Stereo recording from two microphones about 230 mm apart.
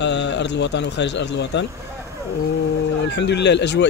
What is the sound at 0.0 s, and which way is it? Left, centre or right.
Speech, left.